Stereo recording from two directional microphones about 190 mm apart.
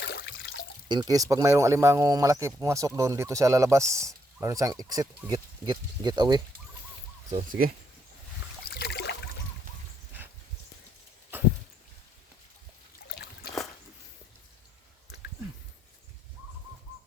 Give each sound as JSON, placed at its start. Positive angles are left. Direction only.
{"t": 0.9, "sound": "speech", "side_deg": -20}
{"t": 7.3, "sound": "speech", "side_deg": -45}
{"t": 8.6, "sound": "a sound", "side_deg": 60}